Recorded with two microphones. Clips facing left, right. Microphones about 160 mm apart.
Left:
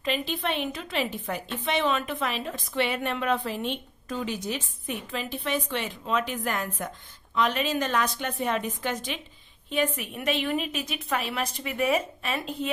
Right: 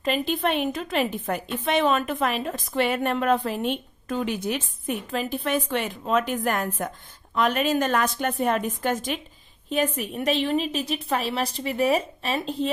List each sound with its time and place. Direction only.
0.0 s a woman's voice: 45° right (ahead or behind)